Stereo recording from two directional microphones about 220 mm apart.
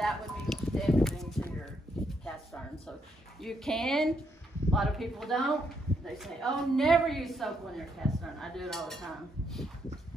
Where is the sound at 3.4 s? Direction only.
Centre (ahead or behind).